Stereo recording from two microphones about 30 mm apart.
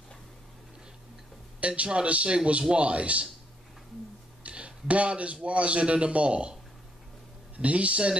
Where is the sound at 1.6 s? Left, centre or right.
Right.